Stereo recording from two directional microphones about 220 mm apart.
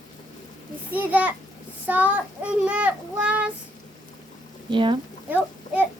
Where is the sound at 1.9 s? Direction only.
5° right (ahead or behind).